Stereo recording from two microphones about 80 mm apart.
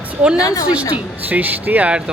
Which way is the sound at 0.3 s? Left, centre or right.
Left.